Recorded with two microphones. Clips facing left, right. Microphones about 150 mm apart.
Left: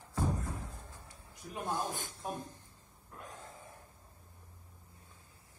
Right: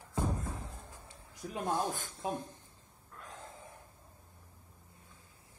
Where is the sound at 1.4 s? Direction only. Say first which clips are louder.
Right 4 dB; 60° right (ahead or behind).